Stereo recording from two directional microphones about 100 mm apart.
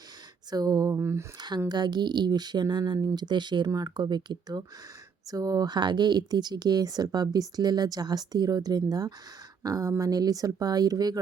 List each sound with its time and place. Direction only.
0.5 s speech: 40° right (ahead or behind)
0.9 s speech: 25° right (ahead or behind)
1.4 s speech: 45° right (ahead or behind)